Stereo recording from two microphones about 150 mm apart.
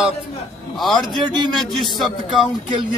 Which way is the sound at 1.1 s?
30° right (ahead or behind).